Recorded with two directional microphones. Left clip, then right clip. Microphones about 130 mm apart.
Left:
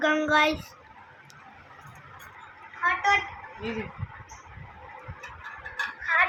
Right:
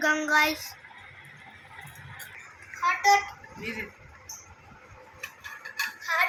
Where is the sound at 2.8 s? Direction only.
5° left (ahead or behind).